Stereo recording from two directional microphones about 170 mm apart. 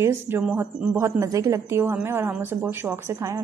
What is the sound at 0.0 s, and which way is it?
A woman's voice, 10° right (ahead or behind).